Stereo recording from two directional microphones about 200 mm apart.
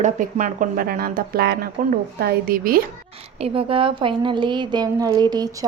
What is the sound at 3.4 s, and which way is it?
A woman's voice, 30° right (ahead or behind).